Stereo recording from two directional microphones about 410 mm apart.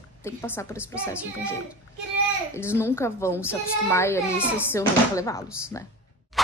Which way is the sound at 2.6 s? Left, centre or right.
Centre.